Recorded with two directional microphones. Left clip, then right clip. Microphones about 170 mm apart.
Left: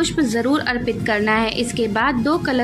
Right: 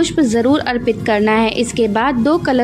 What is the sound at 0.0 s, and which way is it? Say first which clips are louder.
A woman's voice: right 5 dB; 40° right (ahead or behind).